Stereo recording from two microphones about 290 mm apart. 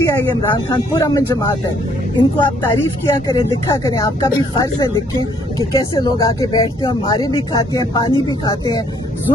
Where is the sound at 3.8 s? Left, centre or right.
Centre.